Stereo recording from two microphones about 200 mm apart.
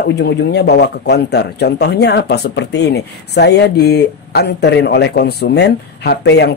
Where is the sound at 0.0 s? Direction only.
55° left (ahead or behind).